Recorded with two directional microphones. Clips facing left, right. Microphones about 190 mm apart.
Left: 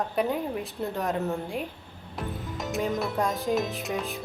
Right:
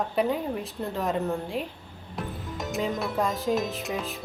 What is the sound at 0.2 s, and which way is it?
Speech, centre (ahead or behind).